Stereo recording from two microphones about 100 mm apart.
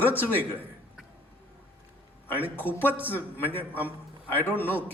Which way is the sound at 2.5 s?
20° left (ahead or behind).